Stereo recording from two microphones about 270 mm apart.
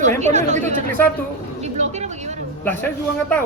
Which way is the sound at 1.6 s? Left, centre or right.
Right.